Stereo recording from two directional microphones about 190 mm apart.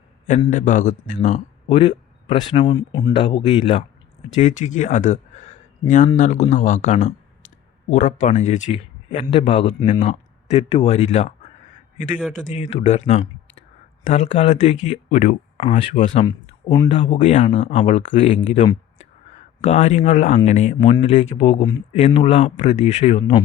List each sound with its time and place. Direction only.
0.3 s speech: 35° left (ahead or behind)
4.4 s speech: 40° left (ahead or behind)
16.2 s speech: 20° left (ahead or behind)